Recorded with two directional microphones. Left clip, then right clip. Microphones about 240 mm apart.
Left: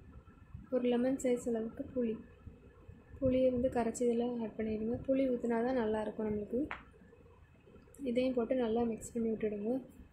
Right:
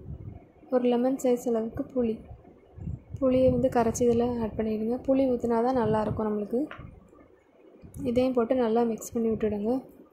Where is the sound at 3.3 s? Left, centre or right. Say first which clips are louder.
Right 9 dB; right.